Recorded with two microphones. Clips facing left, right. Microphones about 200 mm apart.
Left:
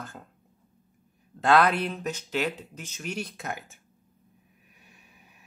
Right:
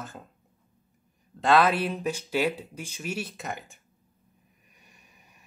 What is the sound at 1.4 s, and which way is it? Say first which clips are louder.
Speech: even; centre (ahead or behind).